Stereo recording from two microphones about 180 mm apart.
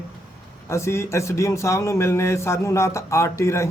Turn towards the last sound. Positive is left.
turn(degrees=15)  # may be behind; listen again after turning